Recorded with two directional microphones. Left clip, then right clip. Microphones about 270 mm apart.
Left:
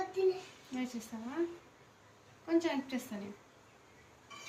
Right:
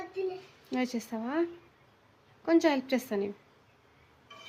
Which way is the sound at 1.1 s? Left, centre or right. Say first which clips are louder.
Right 9 dB; right.